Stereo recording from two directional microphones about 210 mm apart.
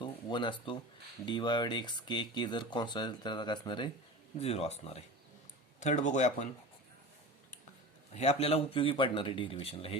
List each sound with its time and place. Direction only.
0.0 s a sound: 20° left (ahead or behind)
1.2 s speech: 20° left (ahead or behind)
8.1 s speech: 30° left (ahead or behind)